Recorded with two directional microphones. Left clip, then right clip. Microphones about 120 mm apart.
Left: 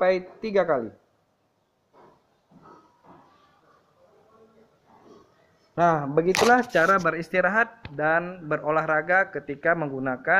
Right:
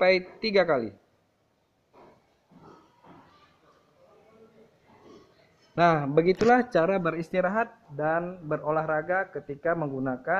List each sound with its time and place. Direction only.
0.0 s speech: 20° right (ahead or behind)
5.8 s a man's voice: 15° right (ahead or behind)